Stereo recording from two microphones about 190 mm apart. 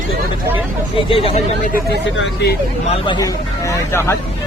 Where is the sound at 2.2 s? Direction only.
60° left (ahead or behind).